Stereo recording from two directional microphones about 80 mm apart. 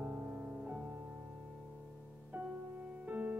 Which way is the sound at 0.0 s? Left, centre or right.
Right.